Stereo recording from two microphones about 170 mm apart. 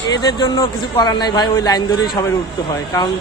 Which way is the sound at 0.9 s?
25° left (ahead or behind).